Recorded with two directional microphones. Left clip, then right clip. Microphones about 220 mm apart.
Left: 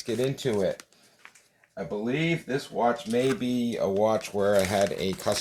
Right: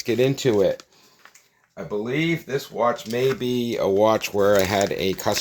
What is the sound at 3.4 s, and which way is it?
Speech, 50° right (ahead or behind).